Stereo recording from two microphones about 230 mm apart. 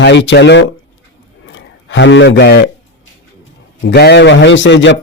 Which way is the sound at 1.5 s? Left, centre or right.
Left.